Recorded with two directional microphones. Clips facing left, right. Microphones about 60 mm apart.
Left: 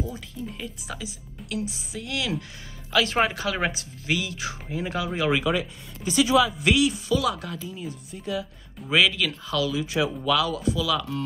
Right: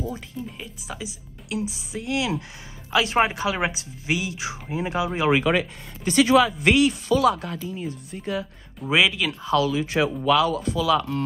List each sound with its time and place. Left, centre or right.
0.6 s speech: centre
5.4 s speech: right
8.9 s speech: centre
9.4 s speech: right